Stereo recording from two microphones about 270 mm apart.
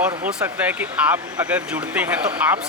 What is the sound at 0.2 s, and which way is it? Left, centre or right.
Speech, centre.